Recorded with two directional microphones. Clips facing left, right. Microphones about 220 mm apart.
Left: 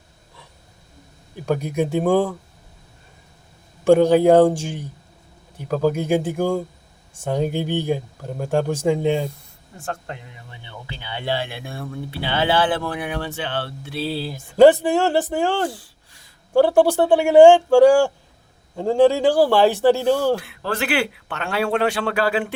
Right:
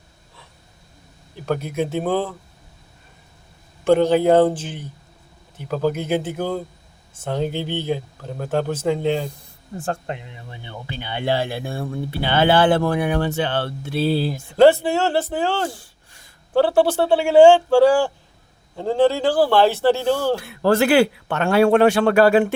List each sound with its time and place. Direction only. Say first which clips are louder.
1.5 s speech: left 1 dB; 15° left (ahead or behind)
3.8 s speech: left 2 dB; 10° left (ahead or behind)
9.7 s speech: right 5 dB; 35° right (ahead or behind)
10.1 s speech: right 4 dB; 20° right (ahead or behind)
11.1 s speech: right 4 dB; 40° right (ahead or behind)
12.2 s speech: right 4 dB; 50° right (ahead or behind)
14.5 s speech: left 2 dB; 15° left (ahead or behind)
20.7 s speech: right 8 dB; 40° right (ahead or behind)